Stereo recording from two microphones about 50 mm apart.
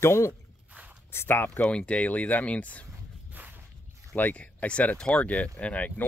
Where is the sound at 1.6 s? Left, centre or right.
Left.